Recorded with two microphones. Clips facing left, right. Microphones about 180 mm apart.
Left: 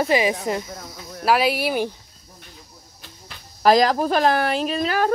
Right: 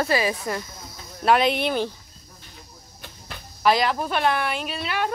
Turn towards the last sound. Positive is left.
turn(degrees=40)  # may be behind; listen again after turning